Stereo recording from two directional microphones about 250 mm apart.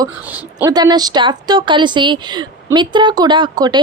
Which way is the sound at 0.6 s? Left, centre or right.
Centre.